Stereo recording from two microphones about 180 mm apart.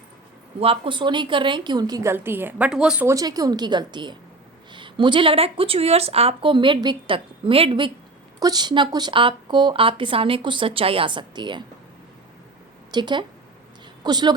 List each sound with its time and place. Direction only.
0.6 s a woman's voice: 30° right (ahead or behind)
12.9 s a woman's voice: 25° right (ahead or behind)